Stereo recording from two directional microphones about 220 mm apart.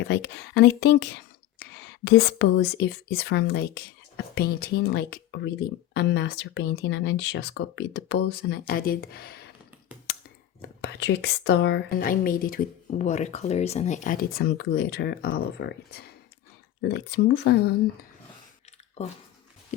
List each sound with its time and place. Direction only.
0.1 s speech: 50° left (ahead or behind)
2.0 s speech: 50° left (ahead or behind)
10.6 s speech: 50° left (ahead or behind)